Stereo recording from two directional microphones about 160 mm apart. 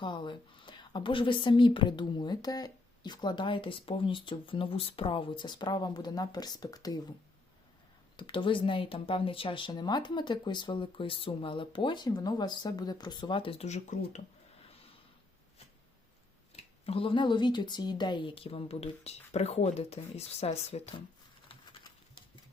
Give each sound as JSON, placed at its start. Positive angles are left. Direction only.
{"t": 0.0, "sound": "a woman's voice", "side_deg": 30}
{"t": 8.1, "sound": "speech", "side_deg": 30}
{"t": 16.6, "sound": "speech", "side_deg": 35}
{"t": 21.5, "sound": "typewriter", "side_deg": 35}